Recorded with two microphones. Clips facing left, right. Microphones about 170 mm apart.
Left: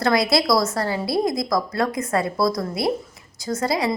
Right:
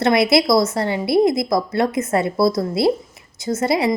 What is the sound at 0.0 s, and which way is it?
A woman's voice, 25° right (ahead or behind).